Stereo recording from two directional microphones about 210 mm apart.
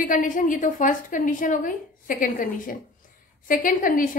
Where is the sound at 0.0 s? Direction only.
40° left (ahead or behind).